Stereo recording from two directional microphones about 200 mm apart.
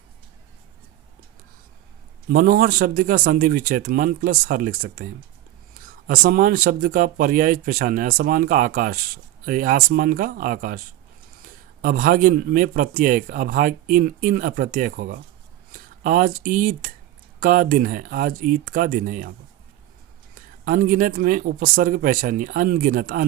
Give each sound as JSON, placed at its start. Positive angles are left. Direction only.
{"t": 2.3, "sound": "a man's voice", "side_deg": -45}
{"t": 6.1, "sound": "a man's voice", "side_deg": -45}
{"t": 20.3, "sound": "a man's voice", "side_deg": -45}